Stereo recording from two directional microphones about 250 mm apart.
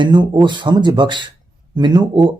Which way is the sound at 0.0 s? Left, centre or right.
Centre.